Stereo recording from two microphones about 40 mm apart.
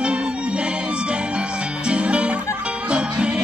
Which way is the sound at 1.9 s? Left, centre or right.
Right.